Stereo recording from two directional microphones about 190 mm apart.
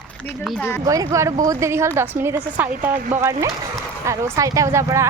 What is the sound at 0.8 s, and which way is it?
A woman's voice, 20° right (ahead or behind).